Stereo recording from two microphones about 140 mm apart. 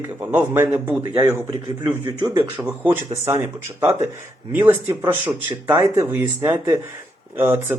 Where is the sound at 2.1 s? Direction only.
30° right (ahead or behind).